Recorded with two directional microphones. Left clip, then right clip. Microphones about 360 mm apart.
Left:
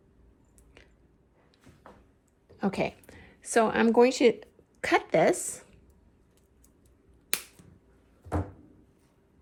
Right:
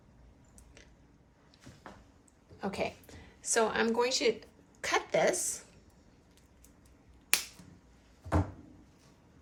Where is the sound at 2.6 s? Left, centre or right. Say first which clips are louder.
Left 5 dB; left.